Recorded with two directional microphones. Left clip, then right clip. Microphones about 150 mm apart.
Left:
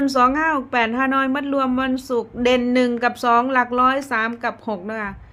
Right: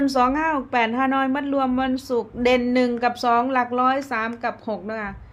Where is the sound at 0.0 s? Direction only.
10° left (ahead or behind).